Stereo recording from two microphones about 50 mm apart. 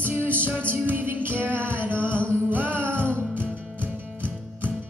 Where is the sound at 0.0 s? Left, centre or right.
Right.